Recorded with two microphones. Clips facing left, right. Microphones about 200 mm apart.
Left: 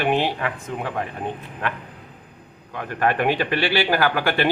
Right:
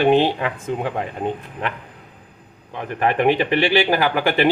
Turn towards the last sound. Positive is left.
turn(degrees=-15)  # may be behind; listen again after turning